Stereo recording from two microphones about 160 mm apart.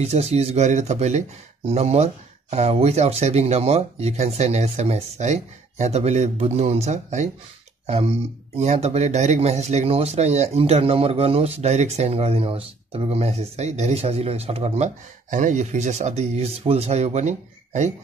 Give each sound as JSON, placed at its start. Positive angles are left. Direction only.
{"t": 0.0, "sound": "speech", "side_deg": -40}